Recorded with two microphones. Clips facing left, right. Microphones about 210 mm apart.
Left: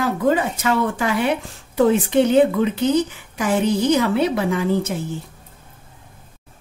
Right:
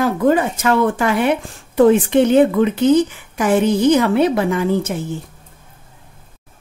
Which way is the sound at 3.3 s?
50° right (ahead or behind).